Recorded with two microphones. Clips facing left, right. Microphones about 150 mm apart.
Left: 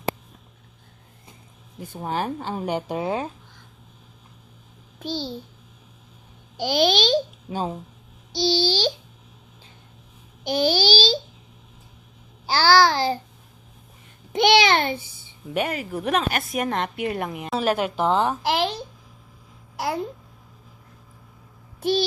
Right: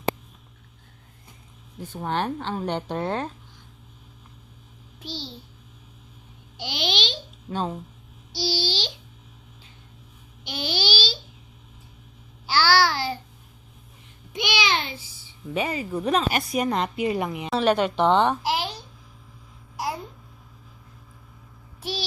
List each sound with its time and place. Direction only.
1.8 s a woman's voice: 10° left (ahead or behind)
4.9 s a child's voice: 45° left (ahead or behind)
6.6 s a child's voice: 45° left (ahead or behind)
7.5 s a woman's voice: 10° left (ahead or behind)
8.3 s a child's voice: 10° right (ahead or behind)
8.6 s a child's voice: 45° left (ahead or behind)
10.4 s a child's voice: 40° left (ahead or behind)
12.5 s a child's voice: 40° left (ahead or behind)
14.3 s a child's voice: 55° left (ahead or behind)
15.5 s a woman's voice: centre (ahead or behind)
21.8 s a child's voice: 50° left (ahead or behind)